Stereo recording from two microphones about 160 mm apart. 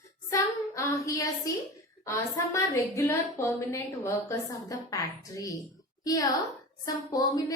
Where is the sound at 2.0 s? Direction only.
20° left (ahead or behind).